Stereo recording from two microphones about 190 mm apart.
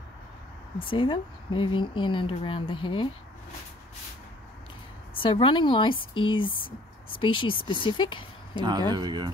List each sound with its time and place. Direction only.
0.7 s speech: 25° left (ahead or behind)
5.1 s speech: 25° left (ahead or behind)
8.5 s speech: 25° right (ahead or behind)